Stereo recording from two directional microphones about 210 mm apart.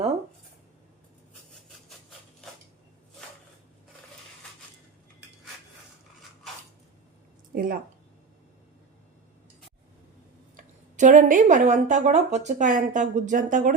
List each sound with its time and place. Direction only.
7.5 s a woman's voice: 45° right (ahead or behind)
10.6 s a woman's voice: 35° right (ahead or behind)